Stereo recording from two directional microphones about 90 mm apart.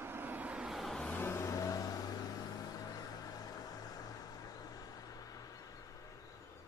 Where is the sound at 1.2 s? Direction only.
30° left (ahead or behind); by 4.1 s 45° left (ahead or behind).